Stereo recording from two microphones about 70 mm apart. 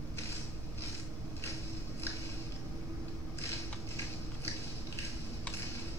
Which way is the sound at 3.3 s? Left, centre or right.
Left.